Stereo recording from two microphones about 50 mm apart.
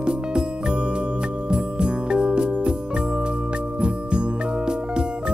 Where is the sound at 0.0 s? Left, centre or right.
Centre.